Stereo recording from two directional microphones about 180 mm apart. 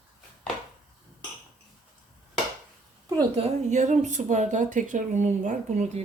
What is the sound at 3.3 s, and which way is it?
A woman's voice, 40° right (ahead or behind).